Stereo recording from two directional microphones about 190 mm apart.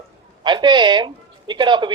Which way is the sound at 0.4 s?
25° right (ahead or behind).